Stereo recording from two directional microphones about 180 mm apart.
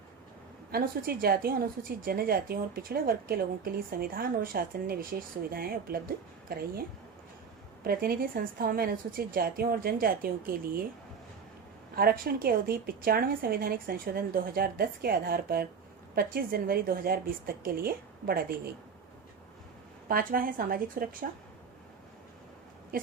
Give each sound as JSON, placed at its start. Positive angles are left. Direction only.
{"t": 0.7, "sound": "a woman's voice", "side_deg": -55}
{"t": 7.9, "sound": "a woman's voice", "side_deg": -55}
{"t": 11.9, "sound": "a woman's voice", "side_deg": -55}
{"t": 20.1, "sound": "a woman's voice", "side_deg": -50}